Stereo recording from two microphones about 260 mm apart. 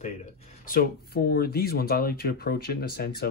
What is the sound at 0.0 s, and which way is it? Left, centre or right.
Speech, left.